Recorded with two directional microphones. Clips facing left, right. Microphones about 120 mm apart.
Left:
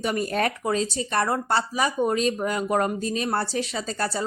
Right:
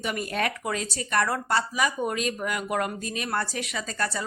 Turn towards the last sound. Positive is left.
turn(degrees=30)  # may be behind; listen again after turning